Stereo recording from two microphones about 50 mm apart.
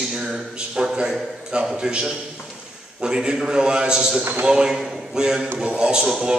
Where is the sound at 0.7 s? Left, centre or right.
Centre.